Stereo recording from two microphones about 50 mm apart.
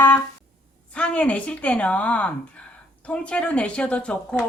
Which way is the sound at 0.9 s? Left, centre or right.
Left.